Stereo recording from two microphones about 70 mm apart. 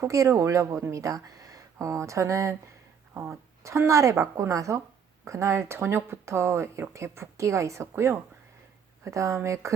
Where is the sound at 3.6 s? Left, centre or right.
Right.